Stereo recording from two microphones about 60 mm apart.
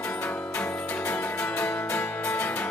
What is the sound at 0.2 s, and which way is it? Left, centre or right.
Music, left.